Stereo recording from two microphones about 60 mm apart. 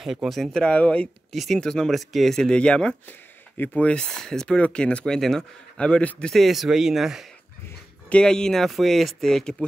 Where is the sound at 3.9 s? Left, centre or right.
Centre.